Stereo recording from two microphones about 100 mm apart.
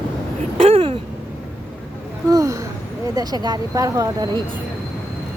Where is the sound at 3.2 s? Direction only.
45° right (ahead or behind).